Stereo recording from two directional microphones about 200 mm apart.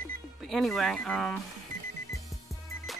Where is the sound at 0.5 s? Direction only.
Centre (ahead or behind).